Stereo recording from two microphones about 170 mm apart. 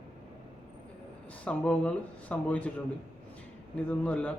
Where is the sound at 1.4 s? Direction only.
5° left (ahead or behind).